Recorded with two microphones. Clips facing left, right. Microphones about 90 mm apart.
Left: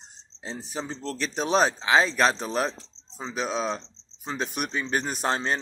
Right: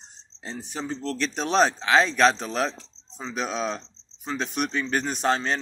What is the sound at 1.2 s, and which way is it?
A man's voice, 5° left (ahead or behind).